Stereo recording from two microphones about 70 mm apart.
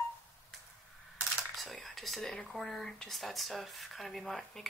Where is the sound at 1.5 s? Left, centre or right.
Centre.